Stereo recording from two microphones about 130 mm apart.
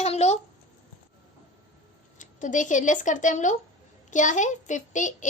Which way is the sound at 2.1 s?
75° left (ahead or behind).